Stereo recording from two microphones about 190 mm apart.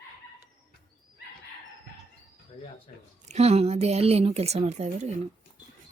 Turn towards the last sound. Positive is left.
turn(degrees=-35)  # may be behind; listen again after turning